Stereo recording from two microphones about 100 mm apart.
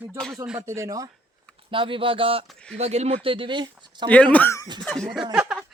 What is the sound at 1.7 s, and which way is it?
Speech, 60° right (ahead or behind).